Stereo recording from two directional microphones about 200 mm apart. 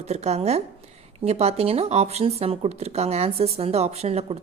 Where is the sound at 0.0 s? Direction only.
35° right (ahead or behind).